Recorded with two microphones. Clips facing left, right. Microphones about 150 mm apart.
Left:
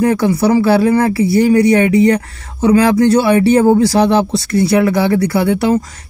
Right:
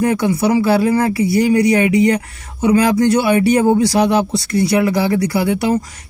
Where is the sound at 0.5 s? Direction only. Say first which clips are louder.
Left 3 dB; 35° left (ahead or behind).